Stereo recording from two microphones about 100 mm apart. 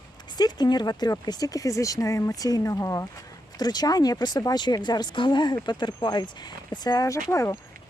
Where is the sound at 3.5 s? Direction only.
40° left (ahead or behind).